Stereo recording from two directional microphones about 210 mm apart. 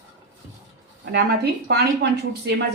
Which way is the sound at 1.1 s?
50° right (ahead or behind).